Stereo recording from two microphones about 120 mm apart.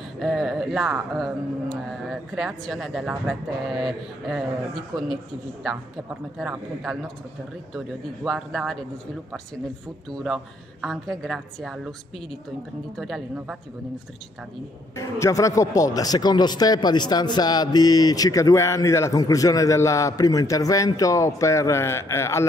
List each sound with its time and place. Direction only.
0.2 s speech: centre (ahead or behind)
10.1 s speech: centre (ahead or behind)
12.9 s speech: centre (ahead or behind)
15.0 s speech: 25° left (ahead or behind)